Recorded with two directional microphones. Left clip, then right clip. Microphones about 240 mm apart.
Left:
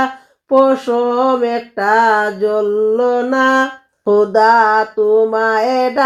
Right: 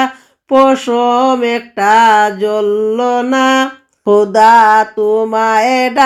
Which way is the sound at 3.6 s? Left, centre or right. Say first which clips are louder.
Right 2 dB; right.